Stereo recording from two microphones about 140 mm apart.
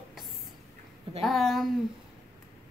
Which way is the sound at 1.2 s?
Centre (ahead or behind).